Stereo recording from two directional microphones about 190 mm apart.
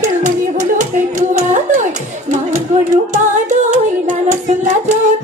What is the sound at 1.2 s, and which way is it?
Singing, 40° right (ahead or behind).